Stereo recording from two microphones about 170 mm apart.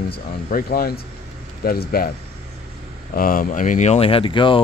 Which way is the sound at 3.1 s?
55° left (ahead or behind).